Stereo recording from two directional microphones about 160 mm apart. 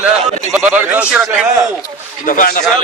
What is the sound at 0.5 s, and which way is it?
Speech, 10° right (ahead or behind).